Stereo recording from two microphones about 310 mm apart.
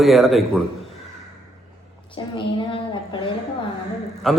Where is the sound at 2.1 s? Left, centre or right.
Centre.